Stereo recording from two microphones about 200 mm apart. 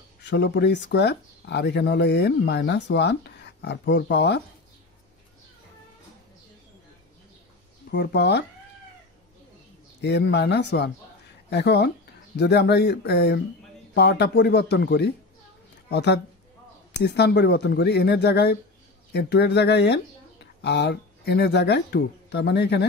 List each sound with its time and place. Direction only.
0.2 s speech: 60° left (ahead or behind)
7.9 s speech: 55° left (ahead or behind)
9.9 s speech: 60° left (ahead or behind)